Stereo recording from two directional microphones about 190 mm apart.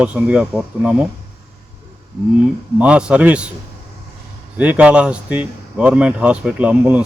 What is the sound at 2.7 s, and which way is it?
Speech, 5° right (ahead or behind).